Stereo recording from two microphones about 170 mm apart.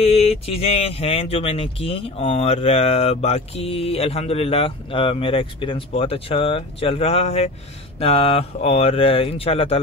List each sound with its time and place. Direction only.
0.0 s speech: 35° left (ahead or behind)